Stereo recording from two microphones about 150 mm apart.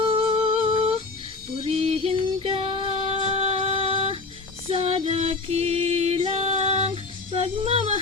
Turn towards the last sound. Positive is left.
turn(degrees=-40)  # may be behind; listen again after turning